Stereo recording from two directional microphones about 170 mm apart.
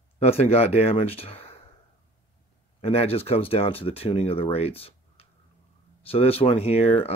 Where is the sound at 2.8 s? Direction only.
35° left (ahead or behind).